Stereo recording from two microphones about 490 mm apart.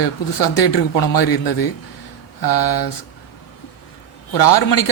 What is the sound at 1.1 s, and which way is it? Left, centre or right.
A man's voice, left.